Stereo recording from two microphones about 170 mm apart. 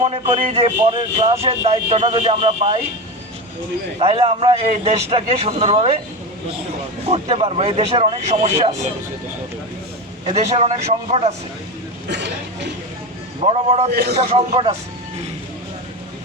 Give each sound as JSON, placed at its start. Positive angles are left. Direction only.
{"t": 0.0, "sound": "speech", "side_deg": -35}
{"t": 3.9, "sound": "speech", "side_deg": -35}
{"t": 7.1, "sound": "speech", "side_deg": -40}
{"t": 10.3, "sound": "speech", "side_deg": -40}
{"t": 12.0, "sound": "speech", "side_deg": -90}
{"t": 13.4, "sound": "speech", "side_deg": -35}
{"t": 13.9, "sound": "a man's voice", "side_deg": -65}